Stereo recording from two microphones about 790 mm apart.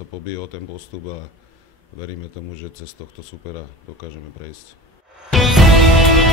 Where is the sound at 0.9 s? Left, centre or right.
Left.